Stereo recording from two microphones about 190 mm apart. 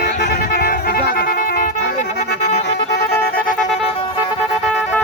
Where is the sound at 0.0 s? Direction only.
55° left (ahead or behind).